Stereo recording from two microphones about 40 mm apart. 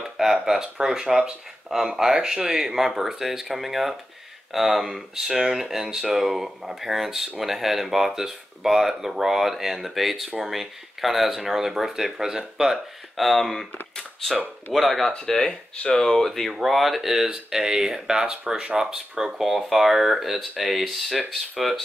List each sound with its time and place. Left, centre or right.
0.0 s speech: centre
14.7 s speech: centre
15.7 s speech: left
16.3 s speech: centre